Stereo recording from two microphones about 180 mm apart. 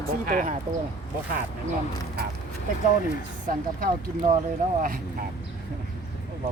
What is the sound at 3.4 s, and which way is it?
Speech, 45° right (ahead or behind).